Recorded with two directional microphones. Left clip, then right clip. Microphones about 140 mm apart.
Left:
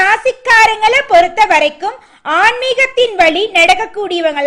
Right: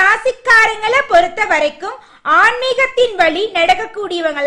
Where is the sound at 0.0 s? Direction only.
15° left (ahead or behind).